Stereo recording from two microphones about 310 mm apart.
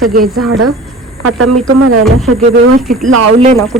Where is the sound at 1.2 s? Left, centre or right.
Right.